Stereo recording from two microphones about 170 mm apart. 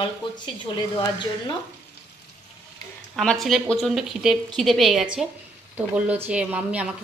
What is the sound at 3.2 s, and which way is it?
Speech, centre (ahead or behind).